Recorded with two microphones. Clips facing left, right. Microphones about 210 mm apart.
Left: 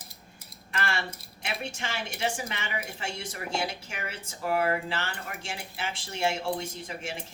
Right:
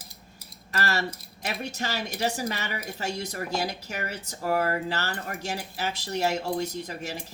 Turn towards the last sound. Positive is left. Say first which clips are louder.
# right 3 dB
turn(degrees=-40)  # may be behind; listen again after turning